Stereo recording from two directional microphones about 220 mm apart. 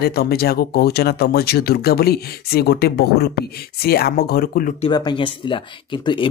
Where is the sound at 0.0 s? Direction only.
45° left (ahead or behind).